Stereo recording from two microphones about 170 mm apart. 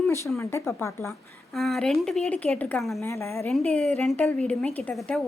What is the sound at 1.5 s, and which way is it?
Speech, centre (ahead or behind).